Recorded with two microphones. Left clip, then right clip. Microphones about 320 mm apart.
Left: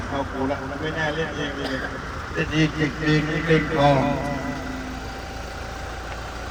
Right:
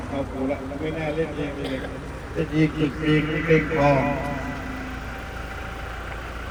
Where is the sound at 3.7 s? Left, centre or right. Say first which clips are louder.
Left 1 dB; left.